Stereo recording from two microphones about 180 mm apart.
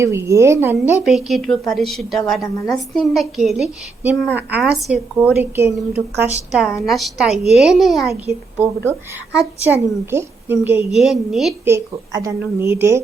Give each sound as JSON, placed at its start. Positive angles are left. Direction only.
{"t": 0.0, "sound": "a woman's voice", "side_deg": -15}
{"t": 6.5, "sound": "a woman's voice", "side_deg": 0}
{"t": 8.1, "sound": "a woman's voice", "side_deg": -15}
{"t": 11.6, "sound": "a woman's voice", "side_deg": -15}